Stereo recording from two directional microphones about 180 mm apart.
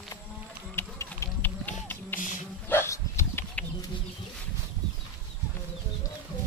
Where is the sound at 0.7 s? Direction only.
15° left (ahead or behind).